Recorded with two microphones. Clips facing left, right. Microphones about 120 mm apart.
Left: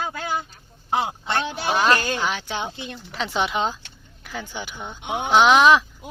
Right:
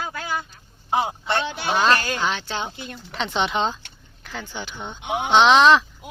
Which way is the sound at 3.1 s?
5° left (ahead or behind).